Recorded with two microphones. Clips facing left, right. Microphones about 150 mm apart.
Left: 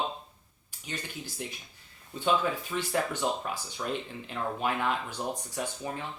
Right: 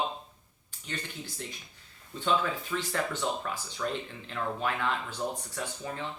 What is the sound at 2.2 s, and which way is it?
Speech, 15° left (ahead or behind).